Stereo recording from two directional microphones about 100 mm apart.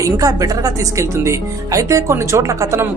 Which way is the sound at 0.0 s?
35° right (ahead or behind).